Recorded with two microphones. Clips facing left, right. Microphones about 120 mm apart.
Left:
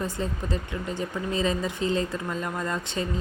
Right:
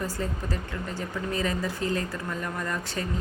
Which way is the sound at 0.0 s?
20° left (ahead or behind).